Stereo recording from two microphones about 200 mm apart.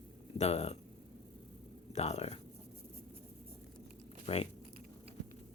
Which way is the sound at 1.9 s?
35° left (ahead or behind).